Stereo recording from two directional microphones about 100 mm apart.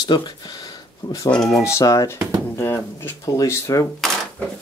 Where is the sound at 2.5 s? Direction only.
25° left (ahead or behind).